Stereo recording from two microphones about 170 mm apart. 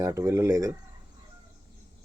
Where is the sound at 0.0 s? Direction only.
15° right (ahead or behind).